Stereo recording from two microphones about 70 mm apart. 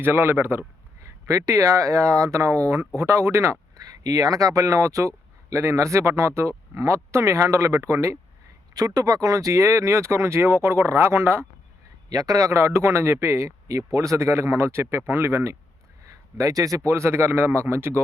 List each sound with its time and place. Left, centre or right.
0.0 s speech: right
1.0 s a man's voice: right
3.8 s a man's voice: right
8.7 s speech: right
12.0 s a man's voice: right
16.0 s speech: right